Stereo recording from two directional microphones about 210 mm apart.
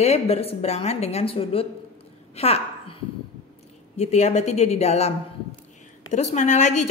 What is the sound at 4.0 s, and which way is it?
A woman's voice, 30° left (ahead or behind).